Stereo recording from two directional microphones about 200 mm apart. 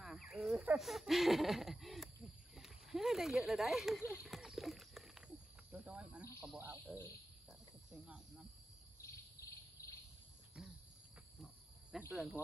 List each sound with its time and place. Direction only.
0.0 s a sound: centre (ahead or behind)
2.5 s snake: centre (ahead or behind)
4.1 s a sound: 5° right (ahead or behind)
5.7 s cricket: 5° right (ahead or behind)
6.4 s speech: 10° right (ahead or behind)
7.4 s cricket: 5° right (ahead or behind)
9.0 s cricket: 15° left (ahead or behind)
10.6 s cricket: 5° right (ahead or behind)
12.1 s speech: 5° right (ahead or behind)